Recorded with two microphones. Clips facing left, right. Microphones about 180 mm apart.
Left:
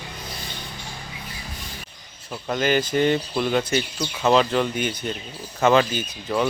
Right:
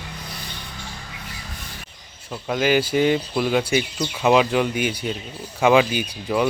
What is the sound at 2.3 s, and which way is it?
Speech, 5° right (ahead or behind).